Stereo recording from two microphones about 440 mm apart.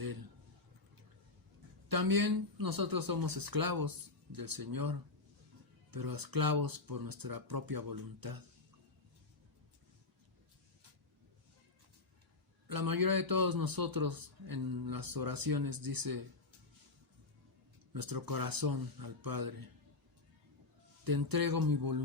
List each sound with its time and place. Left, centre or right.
1.9 s a man's voice: right
12.6 s a man's voice: right
17.9 s a man's voice: right
21.0 s a man's voice: right